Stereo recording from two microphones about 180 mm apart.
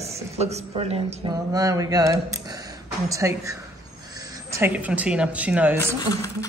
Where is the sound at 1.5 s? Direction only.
20° right (ahead or behind).